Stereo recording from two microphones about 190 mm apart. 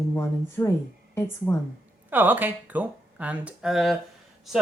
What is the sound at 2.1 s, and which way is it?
Speech, 10° right (ahead or behind).